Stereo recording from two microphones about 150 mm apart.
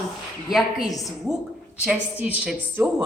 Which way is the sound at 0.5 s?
Centre (ahead or behind).